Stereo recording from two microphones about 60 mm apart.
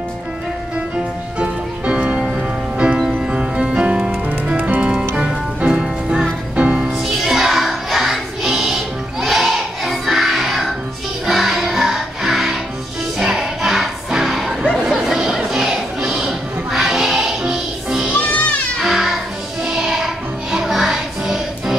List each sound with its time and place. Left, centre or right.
1.4 s music: centre
4.6 s music: right
4.8 s music: centre
14.7 s a sound: centre
18.8 s music: centre